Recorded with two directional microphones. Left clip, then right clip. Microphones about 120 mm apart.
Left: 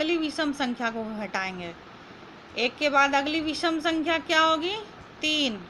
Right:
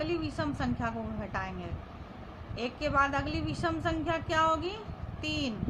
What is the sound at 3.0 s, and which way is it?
Speech, 30° left (ahead or behind).